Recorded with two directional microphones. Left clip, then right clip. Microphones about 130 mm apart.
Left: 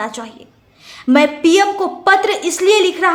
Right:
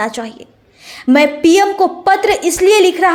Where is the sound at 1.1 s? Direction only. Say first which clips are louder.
Right 2 dB; 25° right (ahead or behind).